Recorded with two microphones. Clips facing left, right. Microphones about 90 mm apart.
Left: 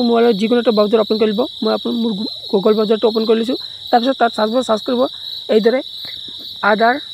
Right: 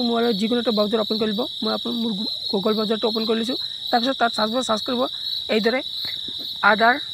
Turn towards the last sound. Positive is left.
turn(degrees=20)  # may be behind; listen again after turning